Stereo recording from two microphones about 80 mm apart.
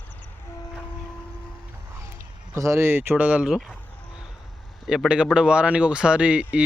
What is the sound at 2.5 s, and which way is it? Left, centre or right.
Speech, right.